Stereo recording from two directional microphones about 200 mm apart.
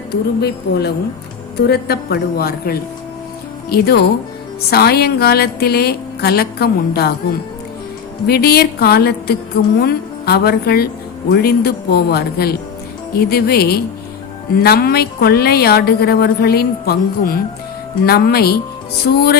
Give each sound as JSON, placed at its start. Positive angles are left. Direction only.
{"t": 0.1, "sound": "a woman's voice", "side_deg": 55}
{"t": 8.3, "sound": "a woman's voice", "side_deg": 50}